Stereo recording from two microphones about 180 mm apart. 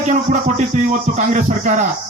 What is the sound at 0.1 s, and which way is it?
Speech, 45° right (ahead or behind).